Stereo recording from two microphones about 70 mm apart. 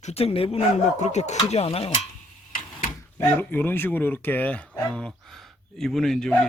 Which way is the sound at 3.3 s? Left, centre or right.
Left.